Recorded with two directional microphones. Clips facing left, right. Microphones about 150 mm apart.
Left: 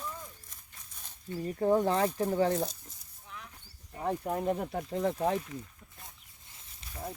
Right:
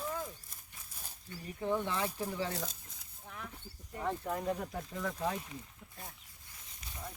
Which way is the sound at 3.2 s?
55° right (ahead or behind).